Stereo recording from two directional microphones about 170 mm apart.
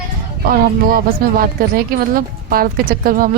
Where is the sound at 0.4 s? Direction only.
60° right (ahead or behind).